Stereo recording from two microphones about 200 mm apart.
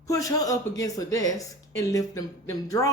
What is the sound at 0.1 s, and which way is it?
Speech, 15° left (ahead or behind).